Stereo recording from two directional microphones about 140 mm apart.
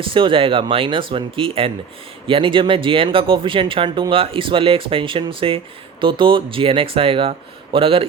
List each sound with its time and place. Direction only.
0.0 s speech: 40° right (ahead or behind)